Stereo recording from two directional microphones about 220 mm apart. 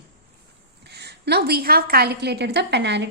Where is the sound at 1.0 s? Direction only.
50° right (ahead or behind).